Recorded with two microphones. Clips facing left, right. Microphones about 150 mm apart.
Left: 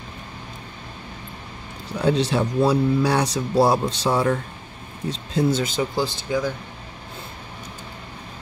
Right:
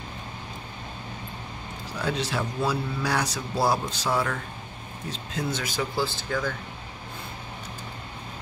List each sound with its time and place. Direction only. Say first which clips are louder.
2.0 s speech: left 8 dB; 30° left (ahead or behind); by 6.5 s 15° left (ahead or behind)